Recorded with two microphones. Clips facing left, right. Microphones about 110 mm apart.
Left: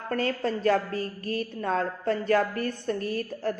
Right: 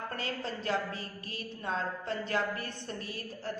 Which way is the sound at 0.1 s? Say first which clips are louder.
Left 10 dB; 45° left (ahead or behind).